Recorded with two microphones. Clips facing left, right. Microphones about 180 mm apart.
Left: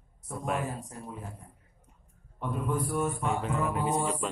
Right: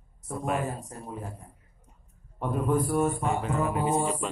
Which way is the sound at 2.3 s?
50° right (ahead or behind).